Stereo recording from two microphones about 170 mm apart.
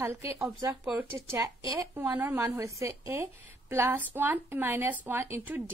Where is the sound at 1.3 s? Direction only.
20° right (ahead or behind).